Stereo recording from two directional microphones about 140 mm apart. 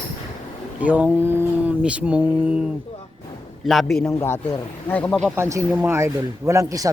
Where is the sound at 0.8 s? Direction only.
10° right (ahead or behind).